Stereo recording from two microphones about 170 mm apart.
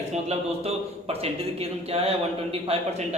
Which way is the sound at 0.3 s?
35° right (ahead or behind).